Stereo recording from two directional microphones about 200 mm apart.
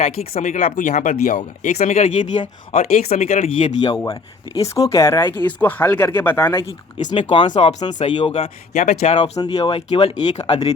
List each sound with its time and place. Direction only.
0.0 s speech: 40° left (ahead or behind)
3.9 s speech: 15° left (ahead or behind)
7.1 s speech: 25° left (ahead or behind)